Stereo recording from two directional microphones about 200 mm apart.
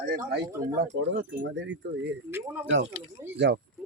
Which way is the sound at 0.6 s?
15° right (ahead or behind).